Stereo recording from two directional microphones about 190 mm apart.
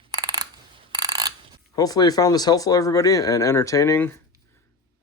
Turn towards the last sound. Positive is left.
turn(degrees=15)  # may be behind; listen again after turning